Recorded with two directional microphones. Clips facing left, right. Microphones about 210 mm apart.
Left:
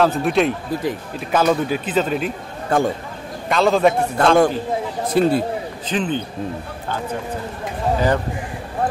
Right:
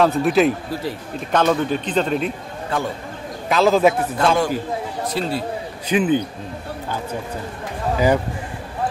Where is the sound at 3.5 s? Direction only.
Centre (ahead or behind).